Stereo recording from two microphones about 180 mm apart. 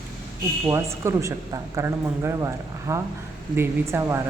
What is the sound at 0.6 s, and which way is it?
A woman's voice, 15° right (ahead or behind).